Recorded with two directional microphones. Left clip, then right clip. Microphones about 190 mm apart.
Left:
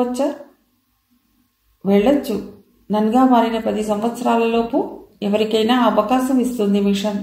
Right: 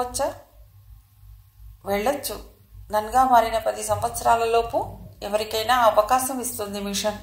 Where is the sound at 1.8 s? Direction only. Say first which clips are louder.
Left 8 dB; 35° right (ahead or behind).